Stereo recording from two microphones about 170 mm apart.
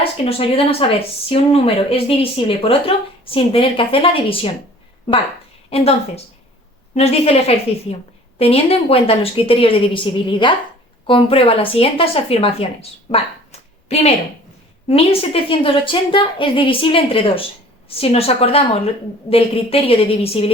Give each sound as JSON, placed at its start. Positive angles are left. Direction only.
{"t": 0.0, "sound": "speech", "side_deg": 35}
{"t": 5.7, "sound": "speech", "side_deg": 35}
{"t": 13.1, "sound": "a sound", "side_deg": 35}
{"t": 14.8, "sound": "speech", "side_deg": 35}